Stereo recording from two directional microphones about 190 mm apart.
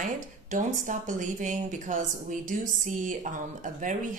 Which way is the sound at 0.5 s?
40° right (ahead or behind).